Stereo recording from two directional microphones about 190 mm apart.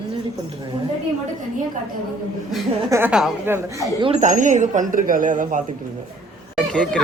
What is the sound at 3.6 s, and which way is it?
Speech, 15° right (ahead or behind).